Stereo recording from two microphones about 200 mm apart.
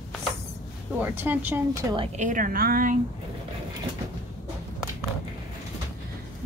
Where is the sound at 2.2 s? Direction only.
40° right (ahead or behind).